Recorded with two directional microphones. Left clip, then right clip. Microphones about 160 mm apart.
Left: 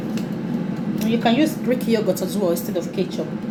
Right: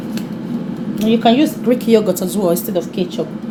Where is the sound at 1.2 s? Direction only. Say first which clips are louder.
Right 5 dB; 70° right (ahead or behind).